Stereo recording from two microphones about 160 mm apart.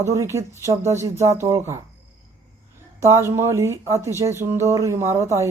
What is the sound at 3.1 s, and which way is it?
Speech, 15° right (ahead or behind).